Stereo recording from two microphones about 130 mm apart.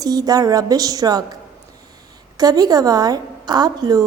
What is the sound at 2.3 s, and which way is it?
A woman's voice, 30° right (ahead or behind).